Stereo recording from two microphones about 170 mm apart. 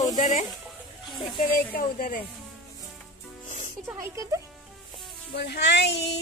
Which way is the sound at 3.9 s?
15° right (ahead or behind).